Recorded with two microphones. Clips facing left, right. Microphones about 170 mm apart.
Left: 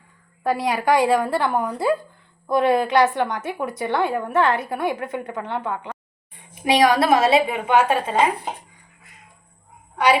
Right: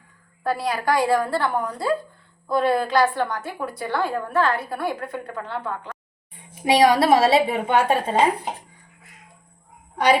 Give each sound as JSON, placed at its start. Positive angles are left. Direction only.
{"t": 0.4, "sound": "a woman's voice", "side_deg": 20}
{"t": 6.5, "sound": "a woman's voice", "side_deg": -25}